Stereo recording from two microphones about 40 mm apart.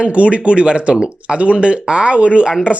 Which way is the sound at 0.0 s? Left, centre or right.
Right.